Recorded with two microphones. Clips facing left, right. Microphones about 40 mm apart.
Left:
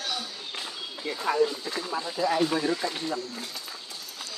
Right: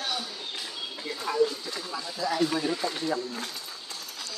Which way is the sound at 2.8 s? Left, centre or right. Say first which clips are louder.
Right 1 dB; centre.